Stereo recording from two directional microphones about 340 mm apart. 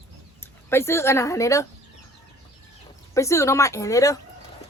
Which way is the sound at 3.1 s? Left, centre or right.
Centre.